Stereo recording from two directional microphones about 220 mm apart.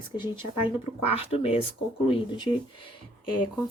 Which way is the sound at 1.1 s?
25° left (ahead or behind).